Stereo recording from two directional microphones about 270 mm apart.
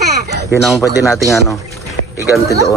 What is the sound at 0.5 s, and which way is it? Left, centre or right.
Speech, centre.